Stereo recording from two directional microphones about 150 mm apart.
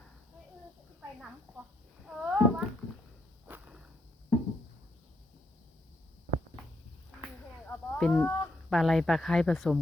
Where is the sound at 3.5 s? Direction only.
5° right (ahead or behind).